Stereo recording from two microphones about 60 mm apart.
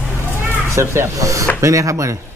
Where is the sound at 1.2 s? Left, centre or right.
Right.